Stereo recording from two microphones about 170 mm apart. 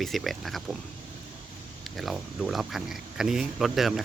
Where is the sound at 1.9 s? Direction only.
Centre (ahead or behind).